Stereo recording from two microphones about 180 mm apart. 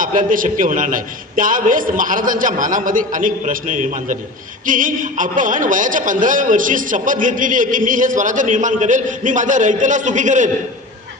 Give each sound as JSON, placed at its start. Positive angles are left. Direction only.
{"t": 0.0, "sound": "a man's voice", "side_deg": -50}